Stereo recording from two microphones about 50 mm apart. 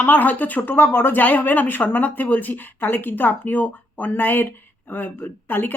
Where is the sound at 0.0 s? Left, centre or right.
Left.